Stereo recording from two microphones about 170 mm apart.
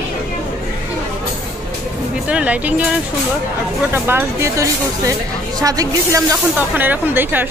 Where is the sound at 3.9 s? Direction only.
15° right (ahead or behind).